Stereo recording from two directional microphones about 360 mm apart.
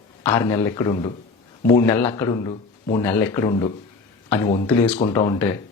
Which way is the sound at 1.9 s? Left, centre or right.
Centre.